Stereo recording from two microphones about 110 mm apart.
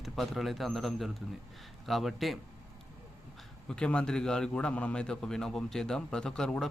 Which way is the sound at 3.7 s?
10° left (ahead or behind).